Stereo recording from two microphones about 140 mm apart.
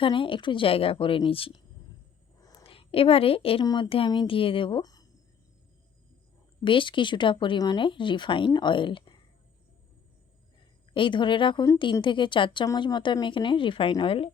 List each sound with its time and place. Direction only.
0.0 s speech: 40° left (ahead or behind)
2.4 s a sound: 25° left (ahead or behind)
2.6 s a woman's voice: 40° left (ahead or behind)
3.6 s speech: 30° left (ahead or behind)
3.8 s speech: 40° left (ahead or behind)
6.7 s speech: 35° left (ahead or behind)
10.9 s speech: 35° left (ahead or behind)